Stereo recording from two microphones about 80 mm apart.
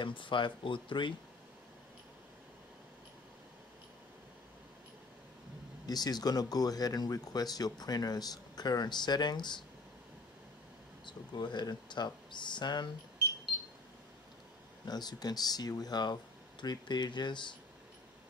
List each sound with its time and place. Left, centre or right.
0.0 s speech: left
5.9 s speech: left
11.1 s speech: left
14.9 s speech: left